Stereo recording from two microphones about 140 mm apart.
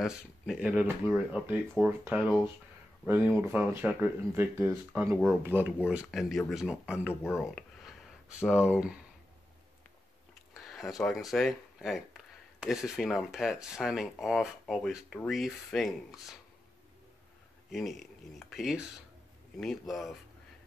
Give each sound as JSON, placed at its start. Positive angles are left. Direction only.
{"t": 0.0, "sound": "speech", "side_deg": -5}
{"t": 2.1, "sound": "speech", "side_deg": 0}
{"t": 3.1, "sound": "speech", "side_deg": -15}
{"t": 10.5, "sound": "speech", "side_deg": 0}
{"t": 17.6, "sound": "speech", "side_deg": 0}